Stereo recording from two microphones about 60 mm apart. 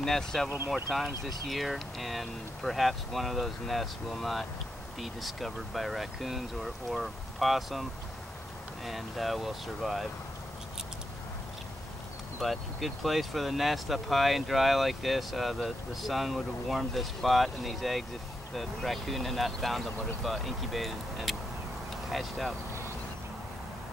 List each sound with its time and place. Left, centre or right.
0.0 s speech: centre
8.8 s speech: centre
12.4 s speech: centre